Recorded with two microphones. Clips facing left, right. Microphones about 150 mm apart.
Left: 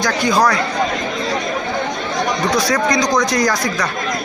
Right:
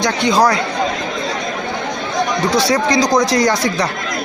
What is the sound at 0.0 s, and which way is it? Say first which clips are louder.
Speech: right 2 dB; 25° right (ahead or behind).